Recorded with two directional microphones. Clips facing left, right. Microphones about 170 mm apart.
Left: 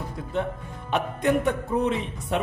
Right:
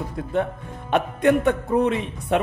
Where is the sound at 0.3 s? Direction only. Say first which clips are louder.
Right 4 dB; 55° right (ahead or behind).